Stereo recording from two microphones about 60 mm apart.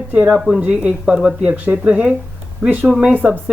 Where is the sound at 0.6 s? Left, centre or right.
Right.